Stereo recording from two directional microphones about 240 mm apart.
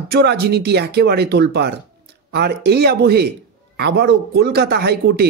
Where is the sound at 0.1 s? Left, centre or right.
Right.